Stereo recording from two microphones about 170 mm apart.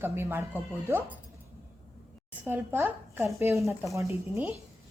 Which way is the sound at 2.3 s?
10° right (ahead or behind).